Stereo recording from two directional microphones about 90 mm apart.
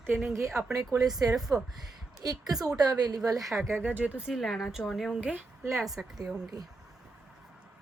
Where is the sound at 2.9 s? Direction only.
50° right (ahead or behind).